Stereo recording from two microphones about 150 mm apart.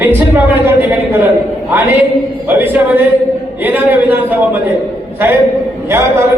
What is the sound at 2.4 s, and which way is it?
A woman's voice, 10° right (ahead or behind).